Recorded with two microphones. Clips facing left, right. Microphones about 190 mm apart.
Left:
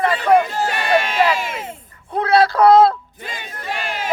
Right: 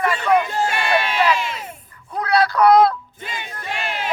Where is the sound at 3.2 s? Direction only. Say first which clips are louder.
Even; 45° left (ahead or behind).